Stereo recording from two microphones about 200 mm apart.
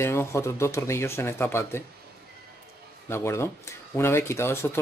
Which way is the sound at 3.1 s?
15° left (ahead or behind).